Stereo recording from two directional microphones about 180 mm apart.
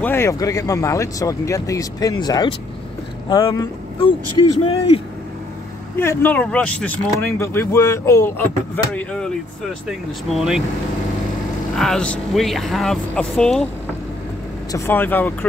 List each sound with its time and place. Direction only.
0.0 s a man's voice: 15° left (ahead or behind); by 5.0 s 30° left (ahead or behind)
5.9 s speech: 10° left (ahead or behind)
11.7 s speech: centre (ahead or behind)
14.7 s speech: 10° left (ahead or behind)